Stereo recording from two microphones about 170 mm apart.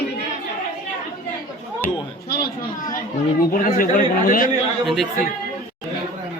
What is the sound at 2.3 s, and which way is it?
Speech, 55° left (ahead or behind).